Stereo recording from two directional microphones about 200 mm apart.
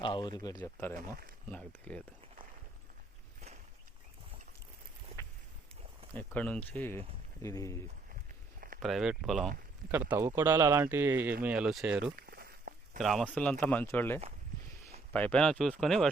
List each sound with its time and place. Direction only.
0.0 s speech: 25° left (ahead or behind); by 2.0 s 5° left (ahead or behind)
6.1 s speech: 5° left (ahead or behind)
8.8 s speech: centre (ahead or behind)
9.9 s speech: 10° right (ahead or behind)
12.2 s walk: 50° right (ahead or behind)
13.0 s speech: centre (ahead or behind)